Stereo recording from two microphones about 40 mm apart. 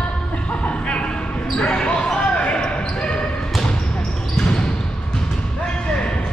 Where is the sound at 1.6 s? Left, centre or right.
Left.